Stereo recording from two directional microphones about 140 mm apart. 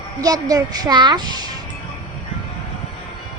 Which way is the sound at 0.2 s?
25° right (ahead or behind).